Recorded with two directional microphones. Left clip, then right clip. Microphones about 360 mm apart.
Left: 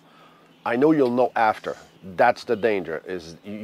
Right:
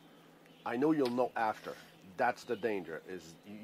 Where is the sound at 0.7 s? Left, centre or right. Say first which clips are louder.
Left 13 dB; left.